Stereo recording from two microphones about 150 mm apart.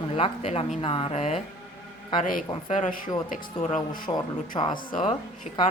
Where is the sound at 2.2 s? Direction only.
65° left (ahead or behind).